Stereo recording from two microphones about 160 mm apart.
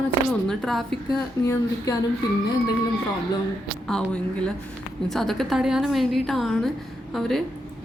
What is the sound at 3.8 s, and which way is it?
A woman's voice, 5° left (ahead or behind).